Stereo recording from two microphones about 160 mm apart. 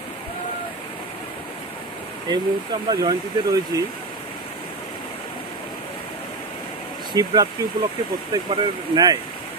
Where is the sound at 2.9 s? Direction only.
20° right (ahead or behind).